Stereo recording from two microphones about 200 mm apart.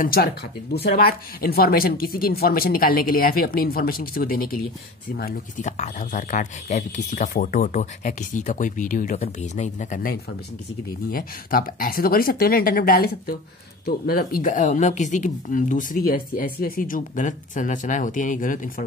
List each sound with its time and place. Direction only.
0.0 s speech: 50° left (ahead or behind)
5.6 s speech: 35° left (ahead or behind)